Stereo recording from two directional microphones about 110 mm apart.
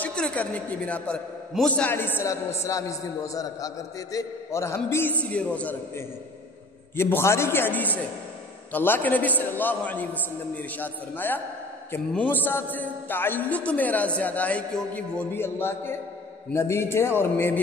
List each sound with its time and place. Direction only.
0.0 s a woman's voice: 10° left (ahead or behind)
5.2 s a woman's voice: 10° left (ahead or behind)
7.0 s a man's voice: 20° left (ahead or behind)